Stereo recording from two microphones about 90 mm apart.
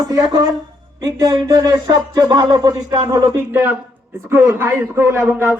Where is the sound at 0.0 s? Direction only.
45° right (ahead or behind).